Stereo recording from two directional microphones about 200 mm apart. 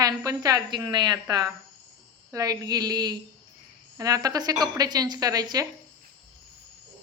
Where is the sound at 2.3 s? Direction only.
15° right (ahead or behind).